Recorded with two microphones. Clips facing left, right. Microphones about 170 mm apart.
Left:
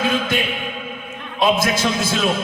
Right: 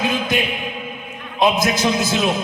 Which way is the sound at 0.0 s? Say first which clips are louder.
Even; 20° right (ahead or behind).